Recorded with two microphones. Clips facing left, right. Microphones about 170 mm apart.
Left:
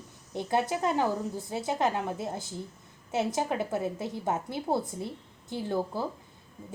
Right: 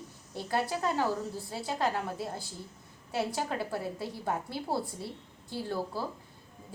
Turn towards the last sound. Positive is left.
turn(degrees=20)  # may be behind; listen again after turning